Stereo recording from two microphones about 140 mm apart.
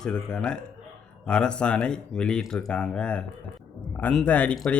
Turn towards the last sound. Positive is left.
turn(degrees=10)  # may be behind; listen again after turning